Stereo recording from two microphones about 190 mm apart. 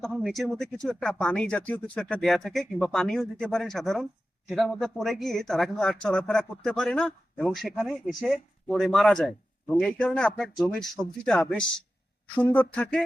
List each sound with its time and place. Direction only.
0.0 s speech: centre (ahead or behind)